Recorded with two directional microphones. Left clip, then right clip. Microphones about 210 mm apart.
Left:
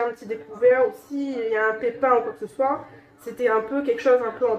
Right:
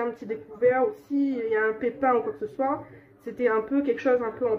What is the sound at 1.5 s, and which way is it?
Speech, 50° right (ahead or behind).